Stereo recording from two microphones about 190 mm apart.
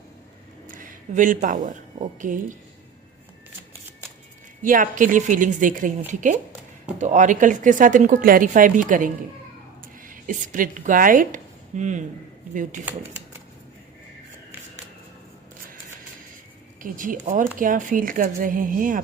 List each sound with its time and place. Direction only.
0.7 s speech: 45° right (ahead or behind)
4.6 s speech: 45° right (ahead or behind)
16.8 s speech: 45° right (ahead or behind)